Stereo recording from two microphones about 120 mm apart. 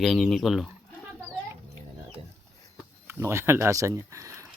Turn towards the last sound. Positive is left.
turn(degrees=-25)  # may be behind; listen again after turning